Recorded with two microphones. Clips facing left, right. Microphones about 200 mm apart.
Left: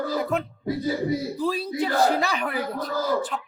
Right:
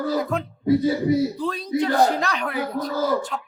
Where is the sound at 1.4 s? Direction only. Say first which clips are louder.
Right 2 dB; 5° left (ahead or behind).